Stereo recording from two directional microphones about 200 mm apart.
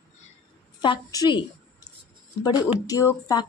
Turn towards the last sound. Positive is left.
turn(degrees=15)  # may be behind; listen again after turning